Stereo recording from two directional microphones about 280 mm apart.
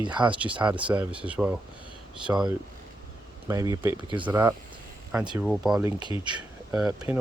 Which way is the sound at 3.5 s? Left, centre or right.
Centre.